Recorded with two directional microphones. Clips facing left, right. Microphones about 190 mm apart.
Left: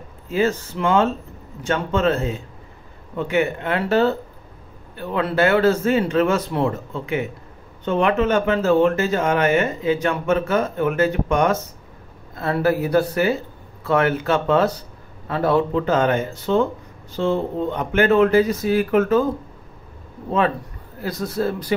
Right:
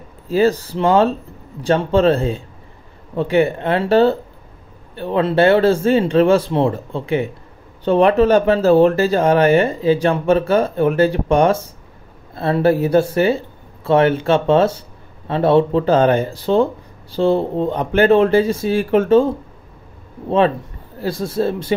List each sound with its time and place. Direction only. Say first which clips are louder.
0.3 s speech: right 5 dB; 35° right (ahead or behind)
20.2 s speech: right 5 dB; 30° right (ahead or behind)